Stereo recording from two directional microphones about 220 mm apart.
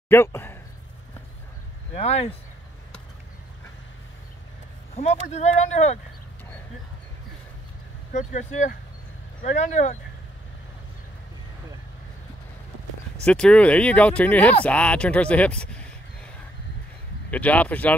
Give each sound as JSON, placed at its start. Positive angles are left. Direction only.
{"t": 0.1, "sound": "speech", "side_deg": 10}
{"t": 2.0, "sound": "speech", "side_deg": 30}
{"t": 4.9, "sound": "speech", "side_deg": 30}
{"t": 8.1, "sound": "speech", "side_deg": 35}
{"t": 13.2, "sound": "speech", "side_deg": 5}
{"t": 17.3, "sound": "speech", "side_deg": 5}